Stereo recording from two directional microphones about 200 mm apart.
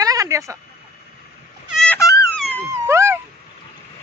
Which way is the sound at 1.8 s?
10° left (ahead or behind).